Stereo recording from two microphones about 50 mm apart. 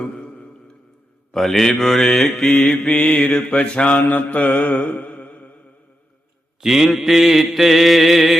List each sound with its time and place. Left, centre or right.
0.0 s mantra: centre
1.3 s mantra: centre
2.9 s mantra: centre
6.6 s mantra: centre